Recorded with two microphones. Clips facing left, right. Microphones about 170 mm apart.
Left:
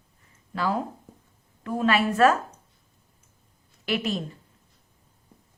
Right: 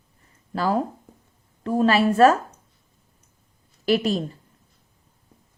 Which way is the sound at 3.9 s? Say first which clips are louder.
Right 6 dB; 35° right (ahead or behind).